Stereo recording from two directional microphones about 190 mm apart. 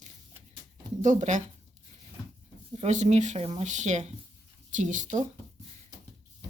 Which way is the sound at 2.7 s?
35° right (ahead or behind).